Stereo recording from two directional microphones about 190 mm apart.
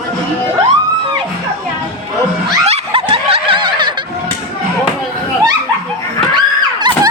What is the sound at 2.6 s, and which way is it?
Snicker, 30° right (ahead or behind).